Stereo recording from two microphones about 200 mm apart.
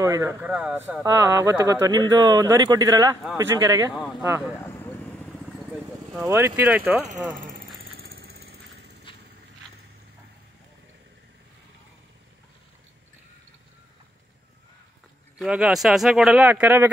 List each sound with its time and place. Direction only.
0.0 s speech: 15° right (ahead or behind)
6.1 s speech: 15° right (ahead or behind)
8.1 s vehicle: 50° right (ahead or behind)
15.3 s speech: 5° right (ahead or behind)